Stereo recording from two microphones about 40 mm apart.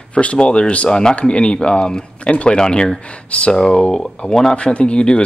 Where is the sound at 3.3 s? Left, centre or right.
Left.